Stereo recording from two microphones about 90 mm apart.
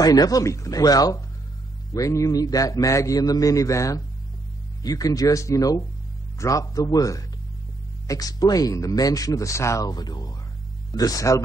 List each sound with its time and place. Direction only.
0.0 s a man's voice: 45° left (ahead or behind)